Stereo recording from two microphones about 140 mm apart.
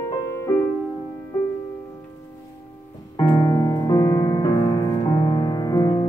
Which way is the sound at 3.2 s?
30° left (ahead or behind).